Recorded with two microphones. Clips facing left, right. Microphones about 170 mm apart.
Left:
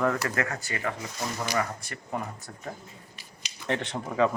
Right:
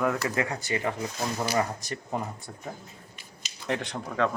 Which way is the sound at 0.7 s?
25° right (ahead or behind).